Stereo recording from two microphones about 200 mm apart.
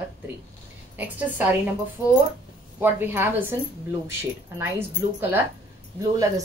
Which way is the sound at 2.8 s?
10° right (ahead or behind).